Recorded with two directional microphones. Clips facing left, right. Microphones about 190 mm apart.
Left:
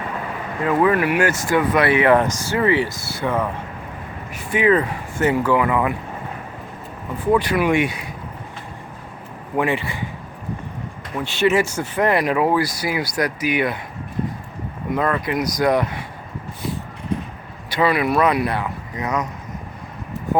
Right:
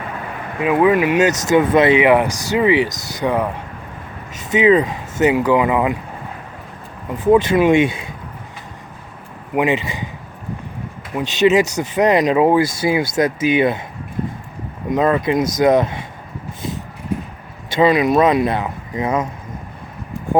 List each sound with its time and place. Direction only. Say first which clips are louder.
0.6 s speech: right 3 dB; 15° right (ahead or behind)
7.3 s speech: right 5 dB; 25° right (ahead or behind)
9.6 s speech: right 3 dB; 20° right (ahead or behind)
11.1 s speech: right 4 dB; 15° right (ahead or behind)
14.8 s speech: right 5 dB; 20° right (ahead or behind)
17.7 s speech: right 5 dB; 20° right (ahead or behind)